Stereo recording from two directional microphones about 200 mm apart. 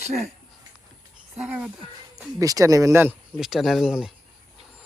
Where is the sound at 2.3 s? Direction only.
15° right (ahead or behind).